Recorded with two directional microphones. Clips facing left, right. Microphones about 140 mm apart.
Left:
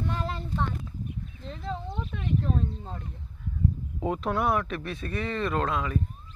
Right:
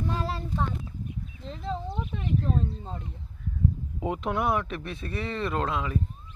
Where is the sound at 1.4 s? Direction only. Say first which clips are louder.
Right 2 dB; centre (ahead or behind).